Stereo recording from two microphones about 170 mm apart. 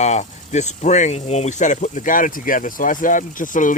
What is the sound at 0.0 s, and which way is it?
Speech, 45° left (ahead or behind).